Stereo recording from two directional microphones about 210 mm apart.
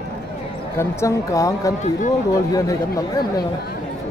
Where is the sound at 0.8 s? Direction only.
15° left (ahead or behind).